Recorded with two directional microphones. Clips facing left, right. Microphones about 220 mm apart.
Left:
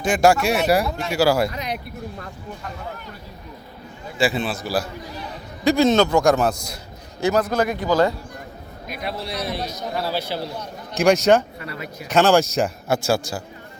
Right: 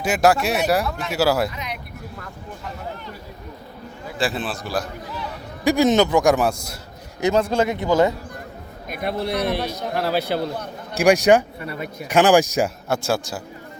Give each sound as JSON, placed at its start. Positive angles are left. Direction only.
{"t": 0.0, "sound": "a man's voice", "side_deg": -5}
{"t": 0.9, "sound": "speech", "side_deg": 25}
{"t": 1.1, "sound": "a man's voice", "side_deg": -5}
{"t": 1.5, "sound": "speech", "side_deg": 35}
{"t": 4.2, "sound": "a man's voice", "side_deg": 0}
{"t": 5.6, "sound": "a man's voice", "side_deg": -15}
{"t": 7.2, "sound": "a man's voice", "side_deg": -25}
{"t": 8.9, "sound": "a man's voice", "side_deg": -50}
{"t": 10.9, "sound": "a man's voice", "side_deg": -15}
{"t": 12.9, "sound": "a man's voice", "side_deg": 0}